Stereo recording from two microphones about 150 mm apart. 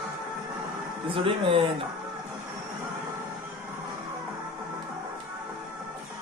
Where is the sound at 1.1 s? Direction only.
35° right (ahead or behind).